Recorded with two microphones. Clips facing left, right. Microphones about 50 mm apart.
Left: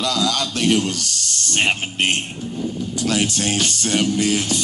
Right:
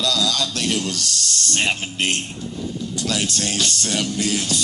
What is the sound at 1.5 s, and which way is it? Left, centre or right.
Speech, left.